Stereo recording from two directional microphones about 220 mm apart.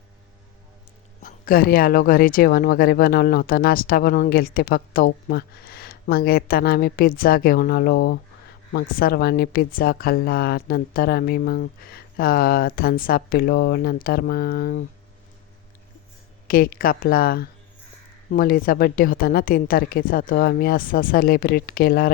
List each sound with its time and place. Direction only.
1.2 s speech: 40° left (ahead or behind)
16.5 s a woman's voice: 40° left (ahead or behind)